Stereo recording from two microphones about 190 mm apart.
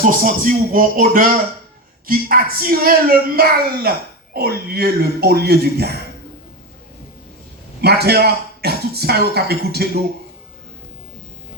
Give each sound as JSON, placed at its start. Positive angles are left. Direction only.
{"t": 0.0, "sound": "speech", "side_deg": -45}
{"t": 7.8, "sound": "speech", "side_deg": -60}